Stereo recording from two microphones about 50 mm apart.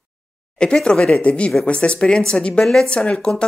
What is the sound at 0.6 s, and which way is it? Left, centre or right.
Speech, centre.